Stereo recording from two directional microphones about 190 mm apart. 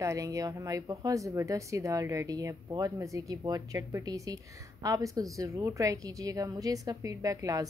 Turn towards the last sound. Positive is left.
turn(degrees=-15)  # may be behind; listen again after turning